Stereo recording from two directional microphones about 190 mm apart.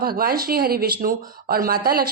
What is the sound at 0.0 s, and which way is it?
A woman's voice, 50° right (ahead or behind).